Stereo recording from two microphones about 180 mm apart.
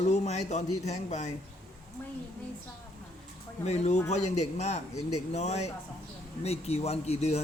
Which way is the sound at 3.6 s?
40° left (ahead or behind).